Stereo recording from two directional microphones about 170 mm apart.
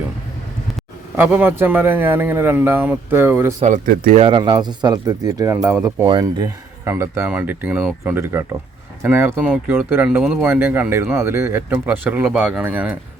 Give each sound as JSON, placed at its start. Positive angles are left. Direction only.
{"t": 1.1, "sound": "speech", "side_deg": -10}
{"t": 3.8, "sound": "speech", "side_deg": -60}
{"t": 4.2, "sound": "speech", "side_deg": -30}